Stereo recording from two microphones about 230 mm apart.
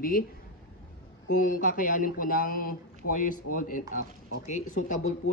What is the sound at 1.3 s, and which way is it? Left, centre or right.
Speech, left.